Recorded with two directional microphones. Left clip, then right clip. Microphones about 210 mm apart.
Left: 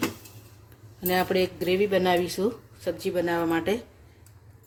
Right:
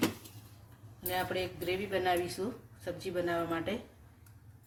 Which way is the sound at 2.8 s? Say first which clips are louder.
Left 9 dB; 50° left (ahead or behind).